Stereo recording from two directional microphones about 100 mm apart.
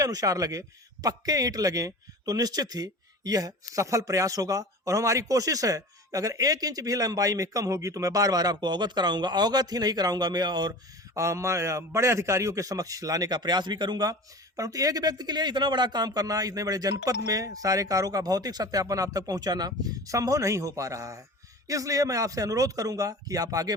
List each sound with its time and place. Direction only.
0.0 s a man's voice: 35° right (ahead or behind)
11.1 s a man's voice: 30° right (ahead or behind)